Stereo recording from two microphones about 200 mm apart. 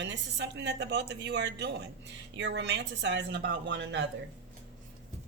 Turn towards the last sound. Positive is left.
turn(degrees=-60)  # may be behind; listen again after turning